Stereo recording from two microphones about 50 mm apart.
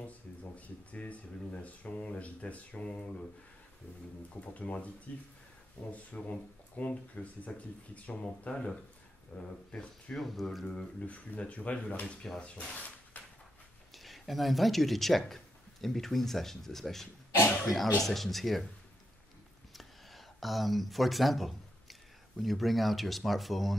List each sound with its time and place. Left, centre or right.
0.0 s speech: left
4.3 s speech: left
10.1 s speech: centre
11.0 s speech: left
13.9 s speech: centre
19.7 s a sound: centre
22.4 s speech: centre